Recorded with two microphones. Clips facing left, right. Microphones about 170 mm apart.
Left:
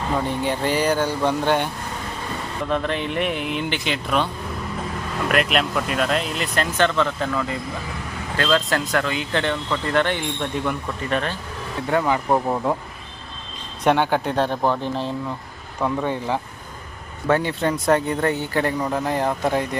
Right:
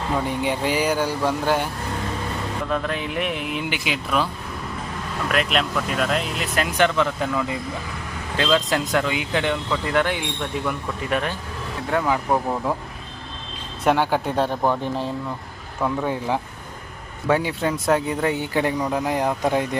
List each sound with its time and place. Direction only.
0.3 s speech: 10° right (ahead or behind)
2.6 s speech: centre (ahead or behind)
5.3 s speech: centre (ahead or behind)
6.7 s speech: 15° right (ahead or behind)
13.8 s speech: 5° right (ahead or behind)
17.2 s speech: 10° right (ahead or behind)